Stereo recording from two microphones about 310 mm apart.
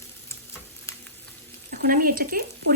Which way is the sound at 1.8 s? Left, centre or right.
Right.